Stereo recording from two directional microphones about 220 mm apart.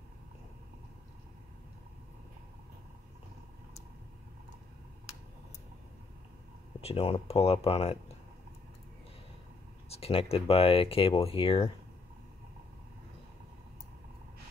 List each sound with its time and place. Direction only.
6.8 s speech: 25° left (ahead or behind)
9.8 s speech: 25° left (ahead or behind)